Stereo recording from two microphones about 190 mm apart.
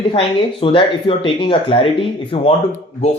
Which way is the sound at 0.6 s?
25° left (ahead or behind).